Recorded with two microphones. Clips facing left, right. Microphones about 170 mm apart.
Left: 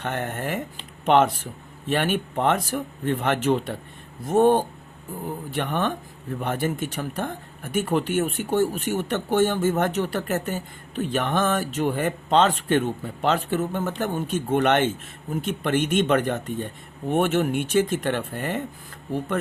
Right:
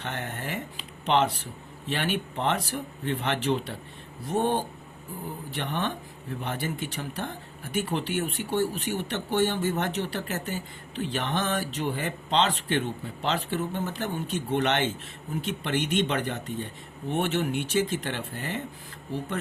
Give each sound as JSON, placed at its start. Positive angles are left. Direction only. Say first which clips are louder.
{"t": 0.0, "sound": "speech", "louder": "left 6 dB", "side_deg": 50}